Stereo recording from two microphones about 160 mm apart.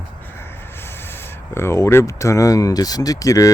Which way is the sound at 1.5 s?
15° left (ahead or behind).